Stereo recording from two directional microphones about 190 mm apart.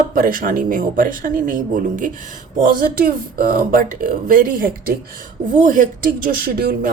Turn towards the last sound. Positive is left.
turn(degrees=-50)  # may be behind; listen again after turning